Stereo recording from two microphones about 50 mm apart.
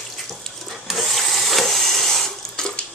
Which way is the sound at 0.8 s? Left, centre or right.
Centre.